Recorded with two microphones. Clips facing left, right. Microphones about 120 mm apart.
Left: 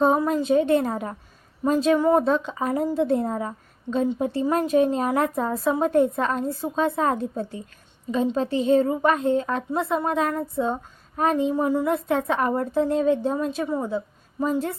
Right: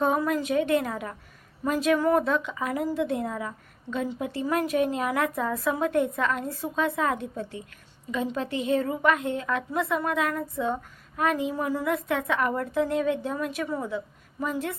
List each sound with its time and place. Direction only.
0.0 s a woman's voice: 30° left (ahead or behind)